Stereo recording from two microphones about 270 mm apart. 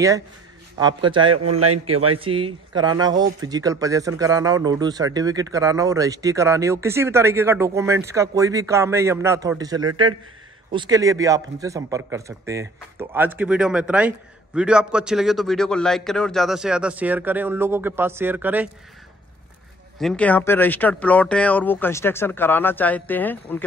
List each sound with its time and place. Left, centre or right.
0.7 s speech: centre
1.3 s a man's voice: right
2.1 s a man's voice: centre
20.0 s speech: centre